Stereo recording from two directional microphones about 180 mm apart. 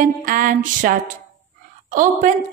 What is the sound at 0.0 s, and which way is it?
Music, 50° right (ahead or behind).